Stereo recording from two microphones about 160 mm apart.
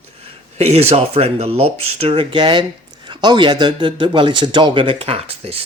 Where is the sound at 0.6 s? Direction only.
40° right (ahead or behind).